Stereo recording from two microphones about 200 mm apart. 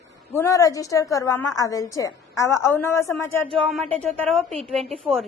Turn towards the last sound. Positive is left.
turn(degrees=-30)  # may be behind; listen again after turning